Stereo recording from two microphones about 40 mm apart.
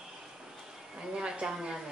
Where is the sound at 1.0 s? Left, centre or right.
Centre.